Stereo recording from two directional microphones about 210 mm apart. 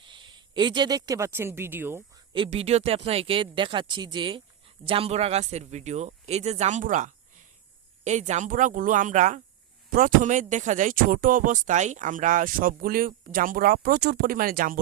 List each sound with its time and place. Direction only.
0.0 s speech: 20° right (ahead or behind)
2.3 s speech: 25° right (ahead or behind); by 14.8 s 40° right (ahead or behind)